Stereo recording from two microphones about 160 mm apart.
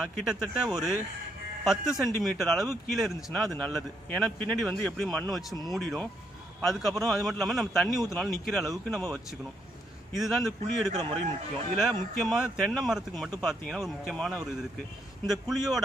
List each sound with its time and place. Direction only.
0.0 s a man's voice: 5° right (ahead or behind)
10.1 s a man's voice: centre (ahead or behind)